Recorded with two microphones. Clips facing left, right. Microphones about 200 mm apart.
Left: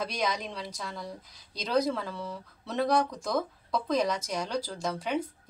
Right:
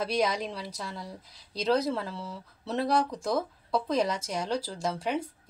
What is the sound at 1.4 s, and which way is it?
Speech, 30° right (ahead or behind).